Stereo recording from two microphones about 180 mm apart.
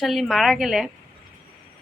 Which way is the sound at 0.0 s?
Centre (ahead or behind).